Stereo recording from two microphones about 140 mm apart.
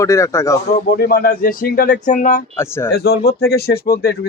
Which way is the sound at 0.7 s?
90° left.